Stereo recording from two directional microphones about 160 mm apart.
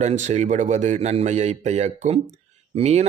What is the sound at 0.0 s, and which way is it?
Speech, 45° right (ahead or behind).